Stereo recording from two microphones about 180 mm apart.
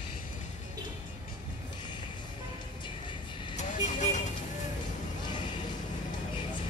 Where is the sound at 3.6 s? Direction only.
40° left (ahead or behind).